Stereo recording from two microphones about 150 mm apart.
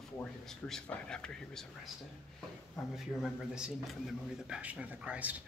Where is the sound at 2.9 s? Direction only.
5° right (ahead or behind).